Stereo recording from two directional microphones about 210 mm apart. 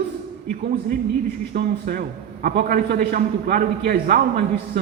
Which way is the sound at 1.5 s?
45° right (ahead or behind).